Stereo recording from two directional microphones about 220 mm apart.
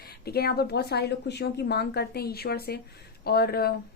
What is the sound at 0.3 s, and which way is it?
Speech, 45° left (ahead or behind).